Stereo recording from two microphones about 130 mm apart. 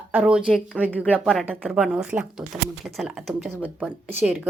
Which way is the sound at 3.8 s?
15° right (ahead or behind).